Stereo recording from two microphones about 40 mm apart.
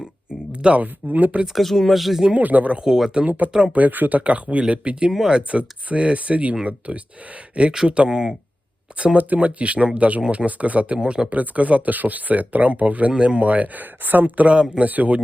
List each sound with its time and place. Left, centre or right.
0.8 s speech: right
1.5 s speech: centre
2.4 s speech: right
2.8 s speech: centre
3.2 s speech: right
4.2 s speech: right
7.7 s speech: centre
9.1 s speech: right
11.0 s speech: centre
11.3 s speech: right
14.0 s speech: right
14.5 s speech: right
14.8 s speech: right